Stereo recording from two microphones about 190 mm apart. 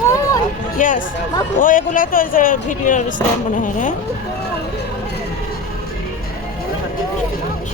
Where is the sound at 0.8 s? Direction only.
45° left (ahead or behind).